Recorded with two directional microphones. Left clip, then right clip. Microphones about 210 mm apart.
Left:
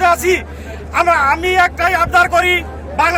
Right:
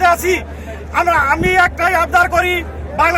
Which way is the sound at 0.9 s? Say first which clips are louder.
Left 1 dB; centre (ahead or behind).